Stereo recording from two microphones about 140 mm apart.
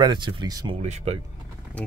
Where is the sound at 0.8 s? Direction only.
50° right (ahead or behind).